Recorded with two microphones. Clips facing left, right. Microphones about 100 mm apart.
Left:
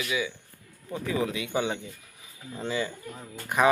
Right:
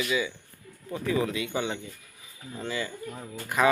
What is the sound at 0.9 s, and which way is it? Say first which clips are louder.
Speech: right 1 dB; 20° left (ahead or behind).